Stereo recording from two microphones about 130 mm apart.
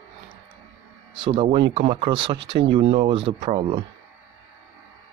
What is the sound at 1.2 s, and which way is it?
Speech, 45° right (ahead or behind).